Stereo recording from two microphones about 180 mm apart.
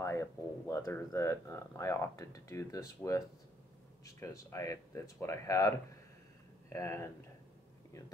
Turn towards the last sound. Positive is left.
turn(degrees=15)  # may be behind; listen again after turning